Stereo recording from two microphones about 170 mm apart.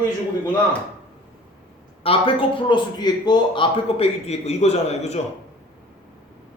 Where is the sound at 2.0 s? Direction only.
30° left (ahead or behind).